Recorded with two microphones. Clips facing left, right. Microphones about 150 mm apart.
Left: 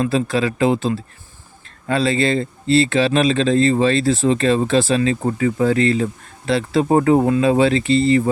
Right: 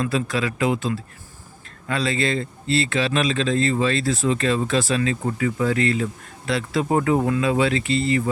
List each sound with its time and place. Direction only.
0.0 s speech: 30° left (ahead or behind)